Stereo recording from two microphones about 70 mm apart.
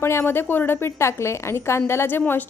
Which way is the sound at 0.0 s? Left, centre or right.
Left.